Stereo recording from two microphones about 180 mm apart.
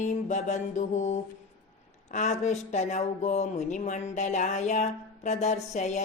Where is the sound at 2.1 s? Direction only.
40° left (ahead or behind).